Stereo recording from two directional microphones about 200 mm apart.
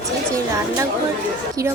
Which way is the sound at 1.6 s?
15° right (ahead or behind).